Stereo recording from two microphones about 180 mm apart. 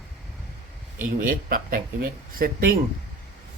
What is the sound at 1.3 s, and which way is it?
Speech, 50° right (ahead or behind).